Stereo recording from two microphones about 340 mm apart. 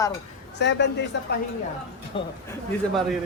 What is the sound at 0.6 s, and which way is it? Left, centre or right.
Speech, left.